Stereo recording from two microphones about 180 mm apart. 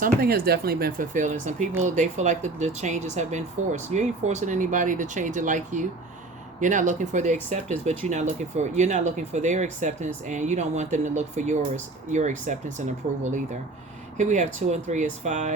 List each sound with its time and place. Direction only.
0.0 s speech: 55° right (ahead or behind); by 15.5 s 40° right (ahead or behind)